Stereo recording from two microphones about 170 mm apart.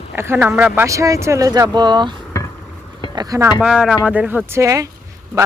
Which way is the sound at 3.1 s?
20° right (ahead or behind).